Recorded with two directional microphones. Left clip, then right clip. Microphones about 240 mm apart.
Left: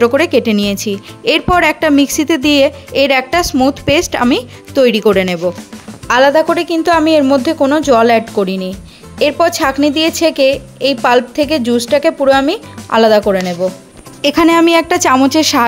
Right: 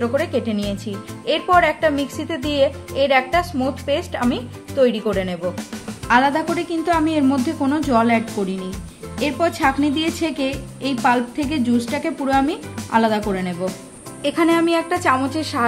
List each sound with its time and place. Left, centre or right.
0.0 s a woman's voice: left